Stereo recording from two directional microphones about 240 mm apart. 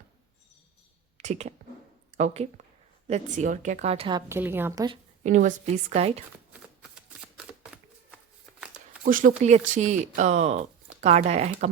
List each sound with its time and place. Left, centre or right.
1.2 s speech: right
4.3 s a woman's voice: centre
5.2 s speech: right
7.2 s shuffling cards: centre
9.0 s speech: right